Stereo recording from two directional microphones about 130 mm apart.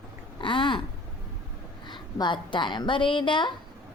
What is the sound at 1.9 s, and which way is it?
A woman's voice, 35° left (ahead or behind).